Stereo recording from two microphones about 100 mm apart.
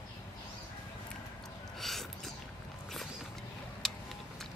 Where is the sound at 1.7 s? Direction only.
5° left (ahead or behind).